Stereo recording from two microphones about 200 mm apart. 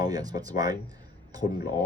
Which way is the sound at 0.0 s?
20° right (ahead or behind).